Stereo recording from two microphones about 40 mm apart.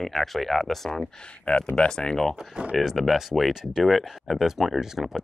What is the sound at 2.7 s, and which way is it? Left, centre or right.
Speech, centre.